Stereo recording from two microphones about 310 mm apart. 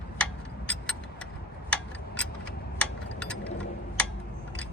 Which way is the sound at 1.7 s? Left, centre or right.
Centre.